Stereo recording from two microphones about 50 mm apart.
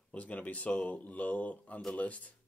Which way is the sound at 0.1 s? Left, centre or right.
Left.